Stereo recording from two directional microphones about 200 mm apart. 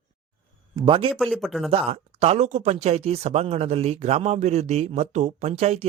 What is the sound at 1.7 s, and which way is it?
Speech, 30° right (ahead or behind).